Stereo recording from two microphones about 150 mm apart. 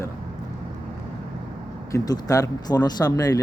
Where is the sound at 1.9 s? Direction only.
25° left (ahead or behind).